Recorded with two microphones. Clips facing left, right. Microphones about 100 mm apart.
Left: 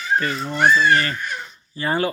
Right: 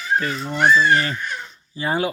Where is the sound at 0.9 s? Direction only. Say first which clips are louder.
Even; 10° right (ahead or behind).